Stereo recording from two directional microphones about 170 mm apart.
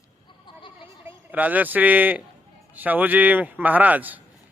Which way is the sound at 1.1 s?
10° right (ahead or behind).